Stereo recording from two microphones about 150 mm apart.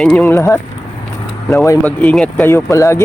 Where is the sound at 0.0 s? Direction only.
10° left (ahead or behind).